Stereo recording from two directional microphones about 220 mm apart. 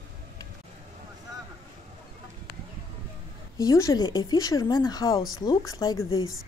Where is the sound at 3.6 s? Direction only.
15° left (ahead or behind).